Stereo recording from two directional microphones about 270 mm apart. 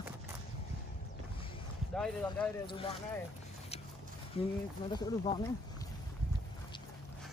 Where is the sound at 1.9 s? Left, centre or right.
Centre.